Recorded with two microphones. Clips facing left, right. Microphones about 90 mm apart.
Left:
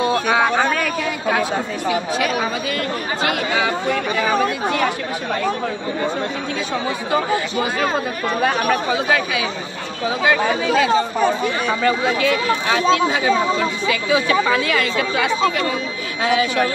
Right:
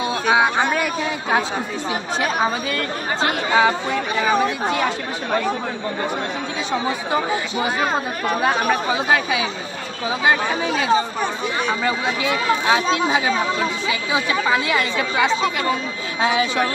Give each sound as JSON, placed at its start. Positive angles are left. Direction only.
{"t": 0.3, "sound": "a sound", "side_deg": -15}
{"t": 2.1, "sound": "speech", "side_deg": -30}
{"t": 8.3, "sound": "speech", "side_deg": -20}